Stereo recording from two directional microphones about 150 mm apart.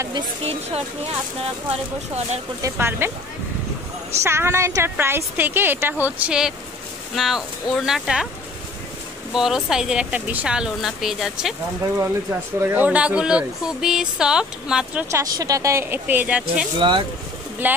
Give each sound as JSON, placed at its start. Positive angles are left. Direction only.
{"t": 0.1, "sound": "speech", "side_deg": -45}
{"t": 2.6, "sound": "a woman's voice", "side_deg": -15}
{"t": 4.2, "sound": "a woman's voice", "side_deg": -15}
{"t": 9.3, "sound": "speech", "side_deg": -5}
{"t": 12.0, "sound": "speech", "side_deg": -15}
{"t": 15.0, "sound": "a woman's voice", "side_deg": -20}
{"t": 17.6, "sound": "a woman's voice", "side_deg": -15}